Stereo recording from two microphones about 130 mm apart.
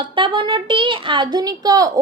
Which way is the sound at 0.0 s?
40° right (ahead or behind).